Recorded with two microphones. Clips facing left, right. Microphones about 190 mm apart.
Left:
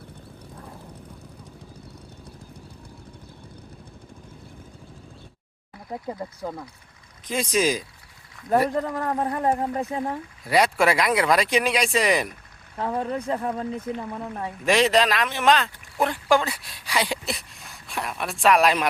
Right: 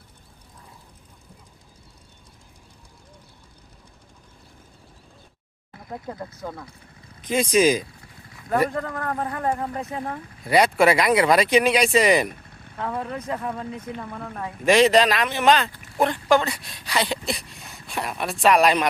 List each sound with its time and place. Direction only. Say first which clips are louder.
6.1 s speech: left 2 dB; 10° left (ahead or behind)
7.3 s speech: right 4 dB; centre (ahead or behind)
8.7 s speech: left 3 dB; 20° left (ahead or behind)
10.4 s speech: right 3 dB; centre (ahead or behind)
12.7 s speech: left 3 dB; 30° left (ahead or behind)
14.0 s speech: left 2 dB; 20° left (ahead or behind)
14.6 s speech: right 3 dB; centre (ahead or behind)